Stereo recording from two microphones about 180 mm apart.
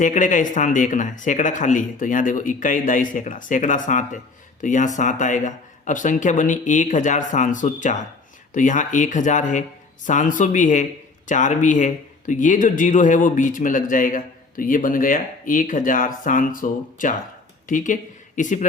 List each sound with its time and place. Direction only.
0.0 s a man's voice: 45° left (ahead or behind)